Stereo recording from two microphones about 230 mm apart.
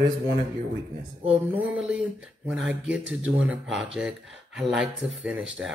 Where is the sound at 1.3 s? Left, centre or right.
Centre.